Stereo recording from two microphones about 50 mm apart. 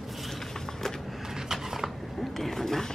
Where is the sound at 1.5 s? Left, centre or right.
Centre.